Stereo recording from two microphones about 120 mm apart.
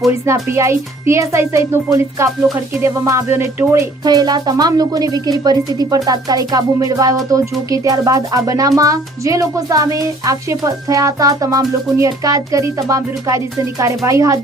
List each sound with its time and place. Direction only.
0.3 s speech: 25° right (ahead or behind)
4.0 s speech: 35° right (ahead or behind)